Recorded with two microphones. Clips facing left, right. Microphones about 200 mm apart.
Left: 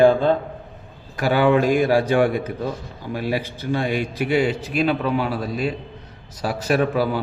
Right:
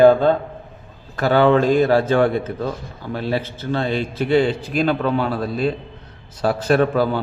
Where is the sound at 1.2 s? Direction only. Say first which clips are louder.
Right 2 dB; 10° left (ahead or behind).